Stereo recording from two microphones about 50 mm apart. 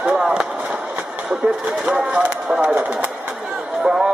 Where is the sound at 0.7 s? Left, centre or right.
Centre.